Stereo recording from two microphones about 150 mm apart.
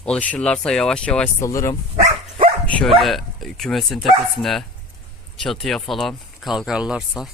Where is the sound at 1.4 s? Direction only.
20° left (ahead or behind).